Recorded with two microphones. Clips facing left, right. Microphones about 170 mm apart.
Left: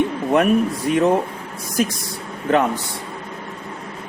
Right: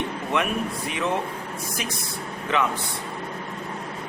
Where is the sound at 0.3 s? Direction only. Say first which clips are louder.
Left 9 dB; 45° left (ahead or behind).